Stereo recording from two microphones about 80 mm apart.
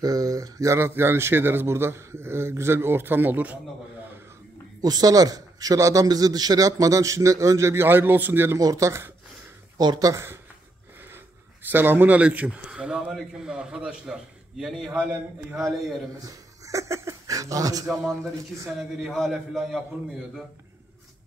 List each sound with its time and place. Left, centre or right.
0.0 s speech: right
4.8 s a man's voice: right
6.0 s speech: right
8.5 s a man's voice: right
9.8 s a man's voice: right
11.6 s a man's voice: right; by 14.7 s centre
14.9 s a man's voice: right
15.5 s a man's voice: centre
16.3 s speech: right
18.8 s a man's voice: centre